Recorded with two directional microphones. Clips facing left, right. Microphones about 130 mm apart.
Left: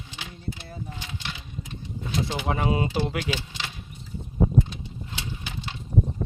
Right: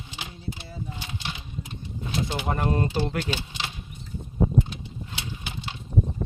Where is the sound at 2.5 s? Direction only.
5° left (ahead or behind).